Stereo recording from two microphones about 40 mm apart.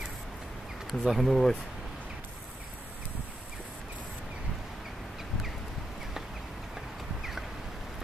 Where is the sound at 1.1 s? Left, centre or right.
Centre.